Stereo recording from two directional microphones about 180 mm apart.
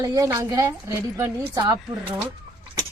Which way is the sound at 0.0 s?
20° right (ahead or behind).